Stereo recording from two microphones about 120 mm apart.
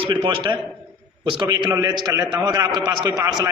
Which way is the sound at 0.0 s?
45° right (ahead or behind).